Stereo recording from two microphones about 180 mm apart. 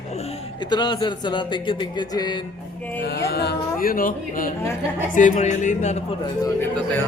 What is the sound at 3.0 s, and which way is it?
Speech, 60° left (ahead or behind).